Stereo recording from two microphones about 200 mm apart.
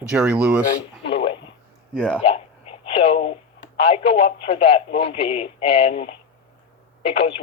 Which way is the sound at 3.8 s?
30° left (ahead or behind).